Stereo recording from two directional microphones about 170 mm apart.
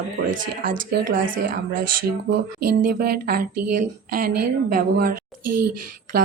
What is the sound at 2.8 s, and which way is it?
A woman's voice, 60° right (ahead or behind).